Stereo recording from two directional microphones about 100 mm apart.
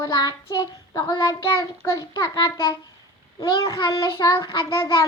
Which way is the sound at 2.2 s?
35° left (ahead or behind).